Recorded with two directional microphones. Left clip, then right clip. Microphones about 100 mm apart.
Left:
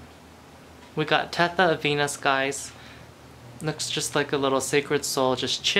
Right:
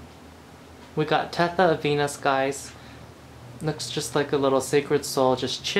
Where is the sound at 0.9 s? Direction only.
15° left (ahead or behind).